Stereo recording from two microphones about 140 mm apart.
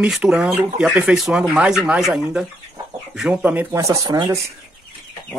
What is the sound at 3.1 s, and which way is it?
Speech, 10° right (ahead or behind).